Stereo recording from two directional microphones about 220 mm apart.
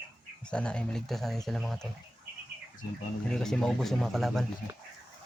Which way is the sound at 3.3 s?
5° left (ahead or behind).